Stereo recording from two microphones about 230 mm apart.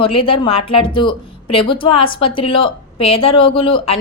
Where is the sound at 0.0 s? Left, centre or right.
Left.